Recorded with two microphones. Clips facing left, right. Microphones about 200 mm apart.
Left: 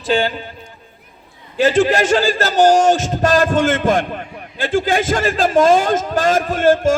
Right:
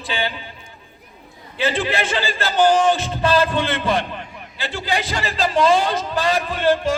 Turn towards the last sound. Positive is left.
turn(degrees=45)  # may be behind; listen again after turning